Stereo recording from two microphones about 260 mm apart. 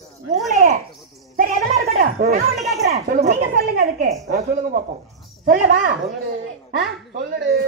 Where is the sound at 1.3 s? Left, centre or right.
Right.